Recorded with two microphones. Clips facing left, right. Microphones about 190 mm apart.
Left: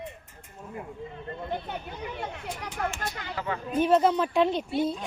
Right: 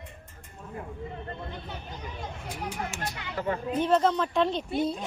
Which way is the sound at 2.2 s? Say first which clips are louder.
Left 2 dB; 65° left (ahead or behind).